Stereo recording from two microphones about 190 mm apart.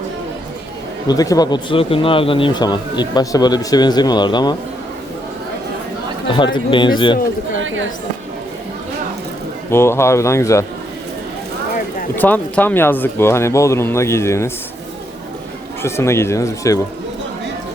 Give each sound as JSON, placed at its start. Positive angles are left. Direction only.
{"t": 1.0, "sound": "speech", "side_deg": 20}
{"t": 6.3, "sound": "speech", "side_deg": 25}
{"t": 9.6, "sound": "speech", "side_deg": 15}
{"t": 12.1, "sound": "speech", "side_deg": 10}
{"t": 15.8, "sound": "speech", "side_deg": 15}